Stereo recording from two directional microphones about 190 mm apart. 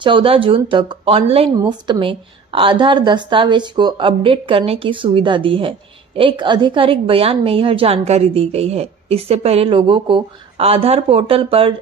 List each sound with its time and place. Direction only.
0.0 s a woman's voice: 25° right (ahead or behind)